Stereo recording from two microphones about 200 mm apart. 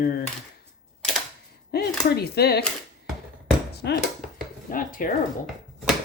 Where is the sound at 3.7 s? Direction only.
55° left (ahead or behind).